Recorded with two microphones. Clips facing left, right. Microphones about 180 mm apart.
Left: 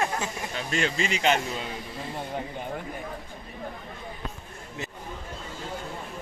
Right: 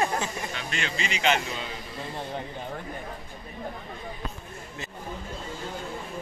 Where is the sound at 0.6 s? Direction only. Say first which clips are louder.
Left 8 dB; 40° left (ahead or behind).